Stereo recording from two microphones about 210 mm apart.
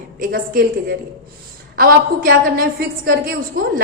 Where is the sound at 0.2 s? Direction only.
45° right (ahead or behind).